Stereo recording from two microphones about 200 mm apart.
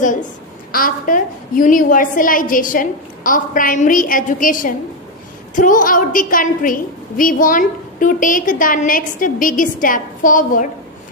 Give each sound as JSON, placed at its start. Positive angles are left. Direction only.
{"t": 0.7, "sound": "a woman's voice", "side_deg": 45}